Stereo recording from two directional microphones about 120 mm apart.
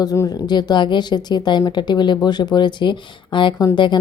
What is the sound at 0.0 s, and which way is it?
A woman's voice, 30° left (ahead or behind).